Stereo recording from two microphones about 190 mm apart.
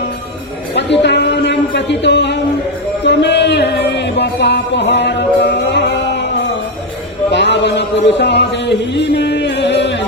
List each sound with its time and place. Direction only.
0.7 s a sound: 65° left (ahead or behind)
3.0 s music: 65° left (ahead or behind)
8.0 s speech: 65° left (ahead or behind)
8.8 s music: 65° left (ahead or behind)